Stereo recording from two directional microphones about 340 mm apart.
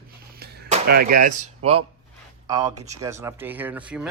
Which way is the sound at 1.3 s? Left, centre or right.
Centre.